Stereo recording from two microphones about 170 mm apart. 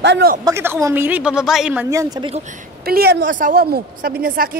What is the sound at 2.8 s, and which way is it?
A woman's voice, 65° right (ahead or behind).